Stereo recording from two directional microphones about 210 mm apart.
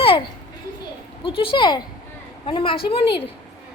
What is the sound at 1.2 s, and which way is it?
A woman's voice, 25° left (ahead or behind).